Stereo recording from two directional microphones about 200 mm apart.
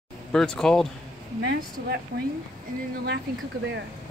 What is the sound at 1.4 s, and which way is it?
Speech, 55° right (ahead or behind).